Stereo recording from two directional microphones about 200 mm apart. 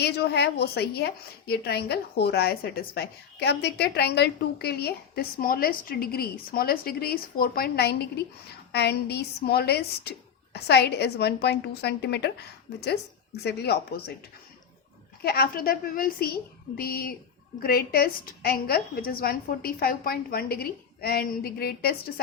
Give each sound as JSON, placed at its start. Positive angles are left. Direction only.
{"t": 0.0, "sound": "a woman's voice", "side_deg": 55}
{"t": 15.2, "sound": "a woman's voice", "side_deg": 50}